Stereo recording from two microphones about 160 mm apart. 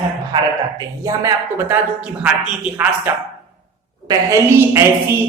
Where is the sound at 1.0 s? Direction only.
20° right (ahead or behind).